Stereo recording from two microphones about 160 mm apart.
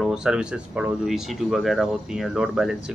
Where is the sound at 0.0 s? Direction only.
5° right (ahead or behind).